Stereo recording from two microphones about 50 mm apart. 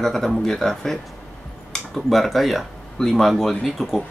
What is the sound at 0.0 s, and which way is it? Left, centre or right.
Speech, centre.